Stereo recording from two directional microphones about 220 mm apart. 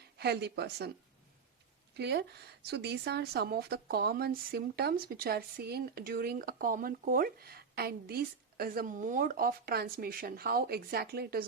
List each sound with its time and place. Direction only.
0.2 s speech: 50° right (ahead or behind)
2.0 s speech: 50° right (ahead or behind)